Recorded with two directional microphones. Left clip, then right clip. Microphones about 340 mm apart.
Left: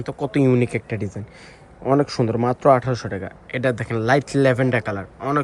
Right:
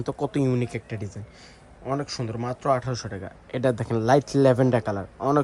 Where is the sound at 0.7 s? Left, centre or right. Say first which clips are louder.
Left 8 dB; right.